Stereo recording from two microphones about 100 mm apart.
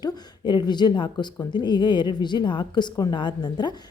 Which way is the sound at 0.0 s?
45° left (ahead or behind).